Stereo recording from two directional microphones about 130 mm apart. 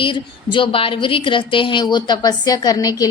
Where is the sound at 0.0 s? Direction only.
40° left (ahead or behind).